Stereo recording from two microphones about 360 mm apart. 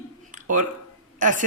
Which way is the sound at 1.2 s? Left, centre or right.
Right.